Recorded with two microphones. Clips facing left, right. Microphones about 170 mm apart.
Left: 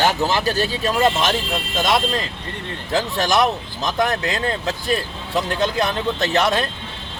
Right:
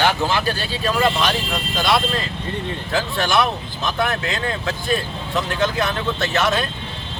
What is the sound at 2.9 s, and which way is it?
Speech, 40° left (ahead or behind).